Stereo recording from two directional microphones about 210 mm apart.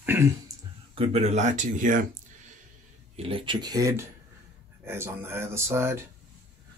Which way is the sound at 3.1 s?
25° right (ahead or behind).